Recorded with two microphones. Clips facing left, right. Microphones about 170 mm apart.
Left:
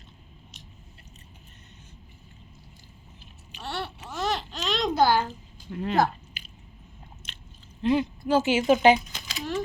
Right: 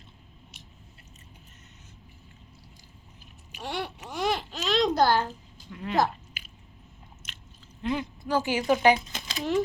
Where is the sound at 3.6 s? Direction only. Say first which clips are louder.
Right 1 dB; 15° right (ahead or behind).